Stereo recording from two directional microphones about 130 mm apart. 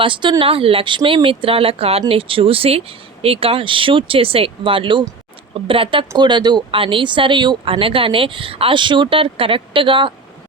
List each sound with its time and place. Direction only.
0.0 s speech: 40° right (ahead or behind)